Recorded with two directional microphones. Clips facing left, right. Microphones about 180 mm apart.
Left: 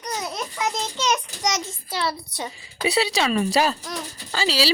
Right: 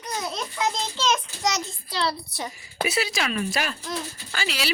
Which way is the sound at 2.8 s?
30° left (ahead or behind).